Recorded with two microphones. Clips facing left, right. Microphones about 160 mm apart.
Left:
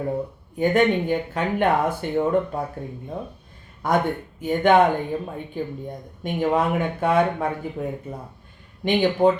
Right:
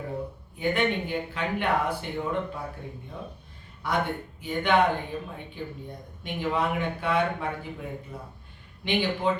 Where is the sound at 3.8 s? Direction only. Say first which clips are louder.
Left 6 dB; 45° left (ahead or behind).